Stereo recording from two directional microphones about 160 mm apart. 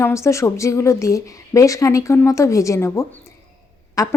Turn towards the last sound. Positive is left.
turn(degrees=20)  # may be behind; listen again after turning